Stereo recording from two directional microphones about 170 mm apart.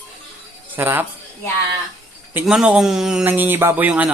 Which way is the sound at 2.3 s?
5° right (ahead or behind).